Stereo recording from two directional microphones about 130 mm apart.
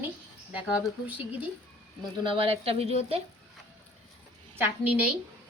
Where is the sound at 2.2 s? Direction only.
45° right (ahead or behind).